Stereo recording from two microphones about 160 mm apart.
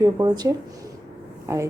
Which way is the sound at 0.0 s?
25° right (ahead or behind).